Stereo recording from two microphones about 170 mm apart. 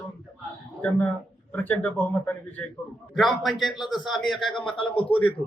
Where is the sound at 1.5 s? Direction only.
10° left (ahead or behind).